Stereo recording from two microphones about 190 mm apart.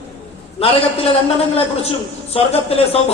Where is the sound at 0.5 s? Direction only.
30° left (ahead or behind).